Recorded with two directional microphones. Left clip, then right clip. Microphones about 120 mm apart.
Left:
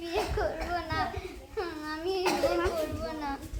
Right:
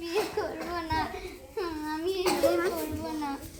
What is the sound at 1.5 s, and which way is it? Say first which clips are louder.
Child singing: right 2 dB; 30° left (ahead or behind).